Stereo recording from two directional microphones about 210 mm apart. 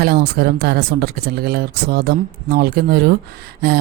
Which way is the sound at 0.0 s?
50° right (ahead or behind).